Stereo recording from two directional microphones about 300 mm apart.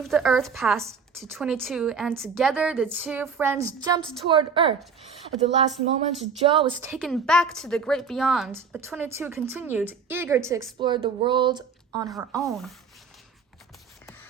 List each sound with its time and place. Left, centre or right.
0.0 s a woman's voice: centre
6.9 s a woman's voice: centre